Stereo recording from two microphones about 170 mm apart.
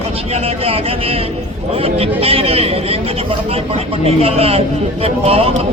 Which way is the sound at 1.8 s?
35° right (ahead or behind).